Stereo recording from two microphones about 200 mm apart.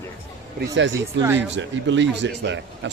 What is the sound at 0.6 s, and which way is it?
Speech, 65° right (ahead or behind).